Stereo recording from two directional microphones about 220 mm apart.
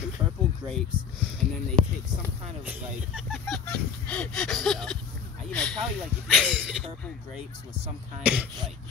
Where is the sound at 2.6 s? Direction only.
5° right (ahead or behind).